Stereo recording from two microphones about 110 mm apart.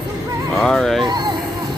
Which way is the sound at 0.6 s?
5° left (ahead or behind).